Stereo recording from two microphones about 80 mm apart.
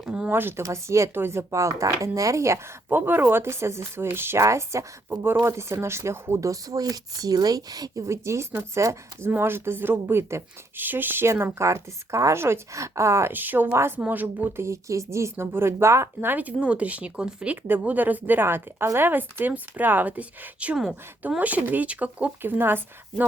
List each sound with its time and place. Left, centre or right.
0.0 s speech: centre
0.3 s speech: right
0.6 s speech: right
8.0 s speech: right
13.3 s speech: right
13.7 s speech: right
14.0 s speech: right
16.3 s speech: centre